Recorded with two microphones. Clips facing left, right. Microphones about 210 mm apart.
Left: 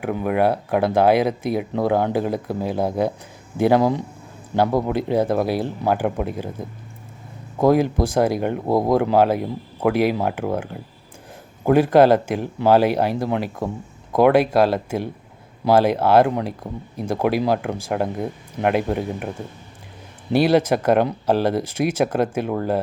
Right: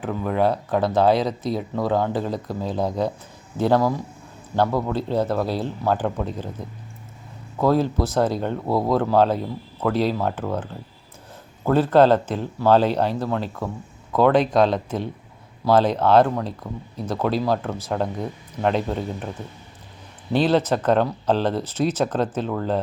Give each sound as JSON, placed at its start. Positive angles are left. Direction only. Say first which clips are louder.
{"t": 0.0, "sound": "speech", "louder": "left 2 dB", "side_deg": 15}
{"t": 20.3, "sound": "speech", "louder": "left 3 dB", "side_deg": 10}